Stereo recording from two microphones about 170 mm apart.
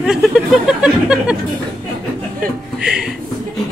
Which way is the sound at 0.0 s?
5° right (ahead or behind).